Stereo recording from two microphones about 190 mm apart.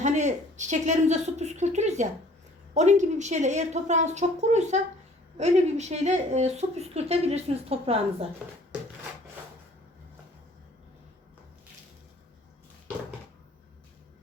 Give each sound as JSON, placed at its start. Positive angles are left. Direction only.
{"t": 0.0, "sound": "speech", "side_deg": -40}